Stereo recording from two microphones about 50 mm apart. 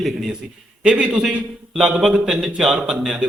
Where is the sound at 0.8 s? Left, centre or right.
Centre.